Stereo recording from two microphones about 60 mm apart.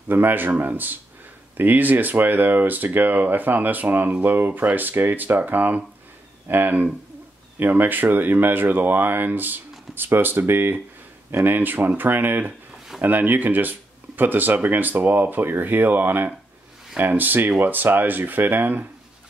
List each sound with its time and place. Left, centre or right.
0.1 s speech: right